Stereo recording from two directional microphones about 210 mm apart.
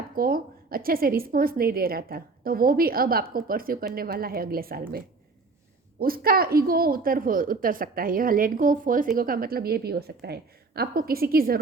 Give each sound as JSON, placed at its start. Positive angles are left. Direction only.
{"t": 0.2, "sound": "a woman's voice", "side_deg": -45}